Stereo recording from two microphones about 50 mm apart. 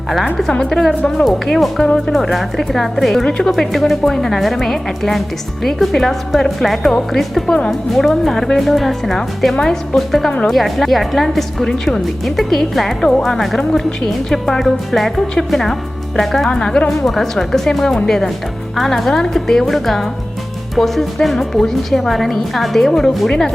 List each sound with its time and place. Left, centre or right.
0.7 s speech: centre
3.2 s speech: centre
3.5 s speech: centre
16.5 s speech: centre